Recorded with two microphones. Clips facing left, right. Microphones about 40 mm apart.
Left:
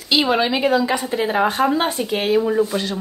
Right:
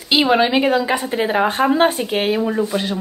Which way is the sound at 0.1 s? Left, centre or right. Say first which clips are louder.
Right 3 dB; centre.